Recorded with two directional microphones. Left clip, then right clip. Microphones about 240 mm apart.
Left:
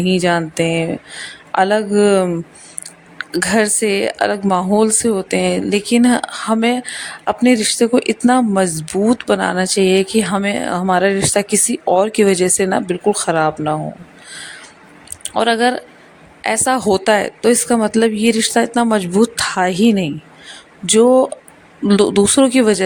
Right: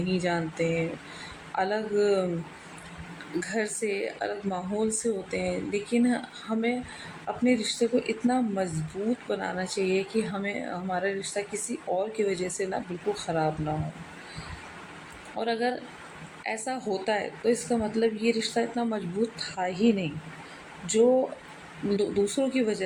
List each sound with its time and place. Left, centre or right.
0.1 s speech: left
3.4 s speech: left
15.4 s speech: left